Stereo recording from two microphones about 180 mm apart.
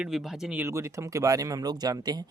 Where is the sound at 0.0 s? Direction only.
Centre (ahead or behind).